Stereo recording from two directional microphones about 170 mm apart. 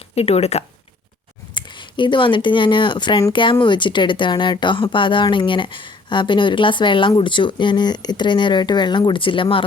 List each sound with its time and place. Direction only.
0.2 s speech: 35° left (ahead or behind)